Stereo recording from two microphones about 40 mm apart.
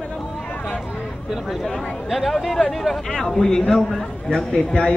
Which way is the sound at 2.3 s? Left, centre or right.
Centre.